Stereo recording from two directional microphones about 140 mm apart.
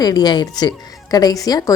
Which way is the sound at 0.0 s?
30° left (ahead or behind).